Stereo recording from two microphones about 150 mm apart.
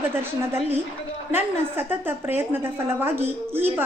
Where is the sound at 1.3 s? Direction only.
15° right (ahead or behind).